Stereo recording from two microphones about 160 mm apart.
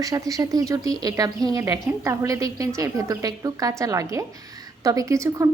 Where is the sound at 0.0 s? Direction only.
20° right (ahead or behind).